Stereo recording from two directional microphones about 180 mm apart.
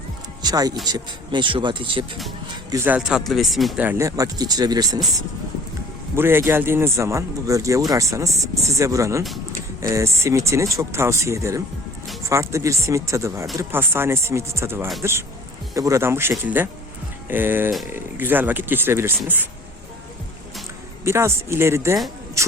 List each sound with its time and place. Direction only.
0.4 s speech: 20° right (ahead or behind)
2.6 s speech: 15° right (ahead or behind)
3.8 s speech: 15° right (ahead or behind)
6.1 s speech: 15° right (ahead or behind)
21.0 s speech: 15° right (ahead or behind)